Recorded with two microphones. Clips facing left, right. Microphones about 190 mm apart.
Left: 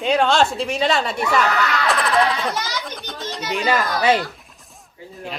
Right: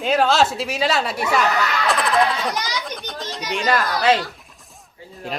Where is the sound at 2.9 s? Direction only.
Centre (ahead or behind).